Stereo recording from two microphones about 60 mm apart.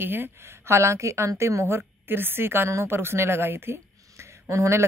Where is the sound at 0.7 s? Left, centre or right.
Right.